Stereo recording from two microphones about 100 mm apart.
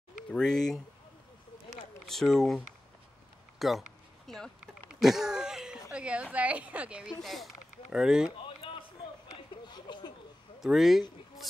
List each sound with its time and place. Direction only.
0.3 s speech: 5° left (ahead or behind)
2.0 s speech: centre (ahead or behind)
5.0 s a sound: 5° right (ahead or behind)
6.3 s speech: 15° right (ahead or behind)
7.2 s speech: centre (ahead or behind)
9.7 s a sound: 45° left (ahead or behind)
10.6 s speech: centre (ahead or behind)